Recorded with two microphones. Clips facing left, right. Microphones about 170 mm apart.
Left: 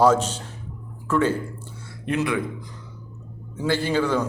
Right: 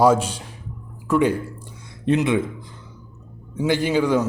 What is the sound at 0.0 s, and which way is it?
Speech, 10° right (ahead or behind).